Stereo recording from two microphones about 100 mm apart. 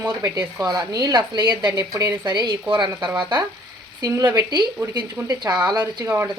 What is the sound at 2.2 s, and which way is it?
Speech, 50° right (ahead or behind).